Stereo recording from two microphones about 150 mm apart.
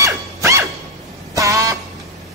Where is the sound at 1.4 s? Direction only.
20° right (ahead or behind).